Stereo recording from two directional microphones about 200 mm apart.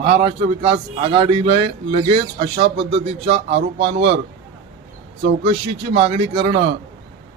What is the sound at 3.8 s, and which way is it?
Speech, 60° right (ahead or behind).